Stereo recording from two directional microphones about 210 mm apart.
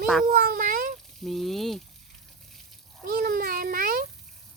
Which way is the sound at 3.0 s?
45° right (ahead or behind).